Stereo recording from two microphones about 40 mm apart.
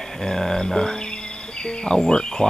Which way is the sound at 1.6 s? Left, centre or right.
Left.